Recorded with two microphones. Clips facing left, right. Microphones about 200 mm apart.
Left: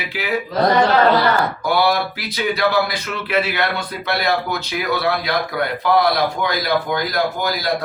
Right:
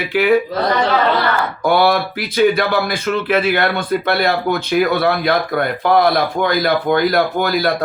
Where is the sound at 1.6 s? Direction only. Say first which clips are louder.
Right 6 dB; 55° right (ahead or behind).